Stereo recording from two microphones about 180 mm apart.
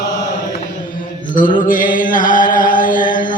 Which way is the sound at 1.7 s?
50° left (ahead or behind).